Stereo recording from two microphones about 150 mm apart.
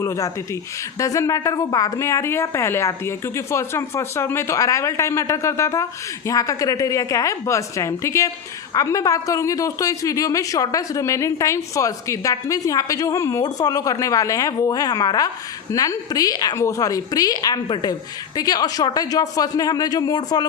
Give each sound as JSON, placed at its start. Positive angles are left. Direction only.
{"t": 0.9, "sound": "speech", "side_deg": 20}